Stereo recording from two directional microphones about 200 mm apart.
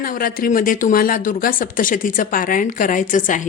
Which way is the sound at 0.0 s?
45° left (ahead or behind).